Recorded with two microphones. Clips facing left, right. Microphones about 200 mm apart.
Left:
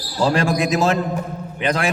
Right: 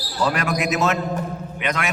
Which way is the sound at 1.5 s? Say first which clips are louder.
Left 5 dB; 30° left (ahead or behind).